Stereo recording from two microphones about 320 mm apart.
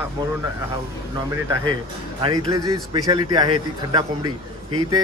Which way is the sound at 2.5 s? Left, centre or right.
Centre.